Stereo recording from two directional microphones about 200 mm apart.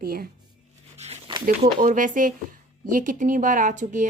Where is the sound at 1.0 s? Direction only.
30° right (ahead or behind).